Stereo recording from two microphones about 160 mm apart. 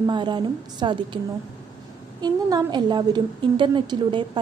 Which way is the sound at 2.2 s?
25° right (ahead or behind).